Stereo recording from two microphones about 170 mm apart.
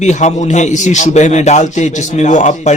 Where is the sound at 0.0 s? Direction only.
40° left (ahead or behind).